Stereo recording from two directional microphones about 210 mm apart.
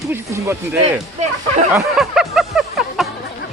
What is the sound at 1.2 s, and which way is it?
Speech, 35° right (ahead or behind).